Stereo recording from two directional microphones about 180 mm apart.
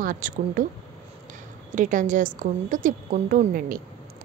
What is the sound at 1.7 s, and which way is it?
A woman's voice, 45° right (ahead or behind).